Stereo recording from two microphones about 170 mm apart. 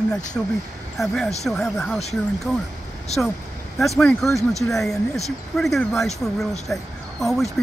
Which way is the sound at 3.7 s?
Centre (ahead or behind).